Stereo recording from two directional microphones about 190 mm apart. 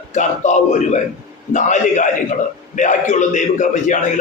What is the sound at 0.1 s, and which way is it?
A man's voice, 40° left (ahead or behind).